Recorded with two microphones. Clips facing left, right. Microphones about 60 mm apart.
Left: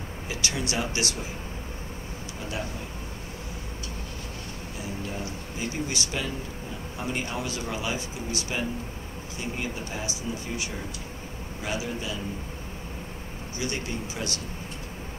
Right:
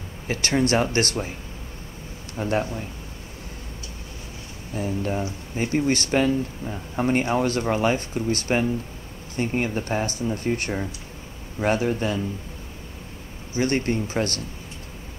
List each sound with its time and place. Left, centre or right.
0.3 s speech: right
2.3 s speech: right
4.7 s speech: right
13.6 s speech: right